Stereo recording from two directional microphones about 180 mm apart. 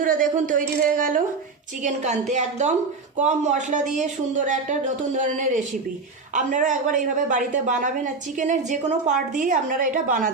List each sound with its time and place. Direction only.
0.0 s a woman's voice: 45° right (ahead or behind)